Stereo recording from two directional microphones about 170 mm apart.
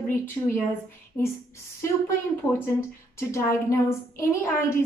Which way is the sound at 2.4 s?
15° left (ahead or behind).